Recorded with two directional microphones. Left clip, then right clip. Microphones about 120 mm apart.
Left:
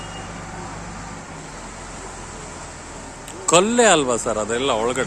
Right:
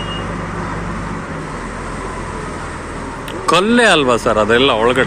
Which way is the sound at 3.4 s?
35° left (ahead or behind).